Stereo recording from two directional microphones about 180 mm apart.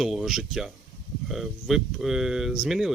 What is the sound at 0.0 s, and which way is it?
Speech, centre (ahead or behind).